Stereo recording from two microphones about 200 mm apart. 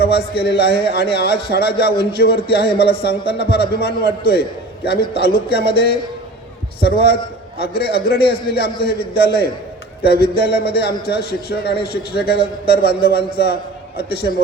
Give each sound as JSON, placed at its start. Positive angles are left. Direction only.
{"t": 0.0, "sound": "a man's voice", "side_deg": 50}